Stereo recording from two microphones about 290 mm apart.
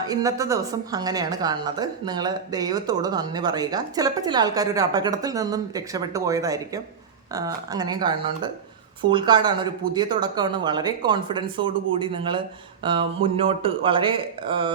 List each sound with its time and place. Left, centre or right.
0.0 s a woman's voice: centre